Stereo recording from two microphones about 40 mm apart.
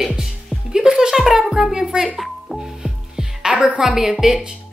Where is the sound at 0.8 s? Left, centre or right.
Right.